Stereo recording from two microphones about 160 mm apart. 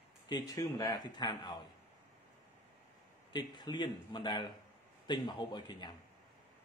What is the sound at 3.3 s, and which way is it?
A man's voice, 30° left (ahead or behind).